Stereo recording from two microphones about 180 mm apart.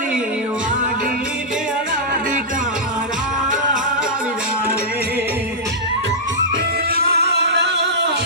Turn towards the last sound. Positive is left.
turn(degrees=-70)  # may be behind; listen again after turning